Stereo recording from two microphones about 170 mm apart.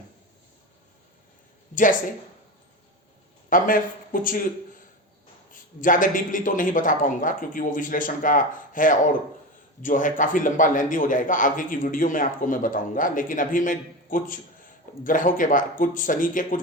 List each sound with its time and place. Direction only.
3.5 s a man's voice: 55° left (ahead or behind)
5.5 s a man's voice: 50° left (ahead or behind)